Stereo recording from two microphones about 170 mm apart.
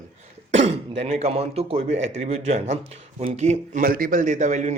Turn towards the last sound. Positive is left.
turn(degrees=-45)  # may be behind; listen again after turning